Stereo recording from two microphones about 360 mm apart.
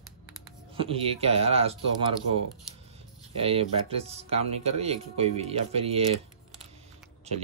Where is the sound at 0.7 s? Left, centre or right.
Centre.